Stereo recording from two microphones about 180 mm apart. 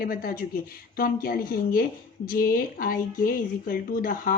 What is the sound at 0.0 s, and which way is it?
Speech, 55° left (ahead or behind).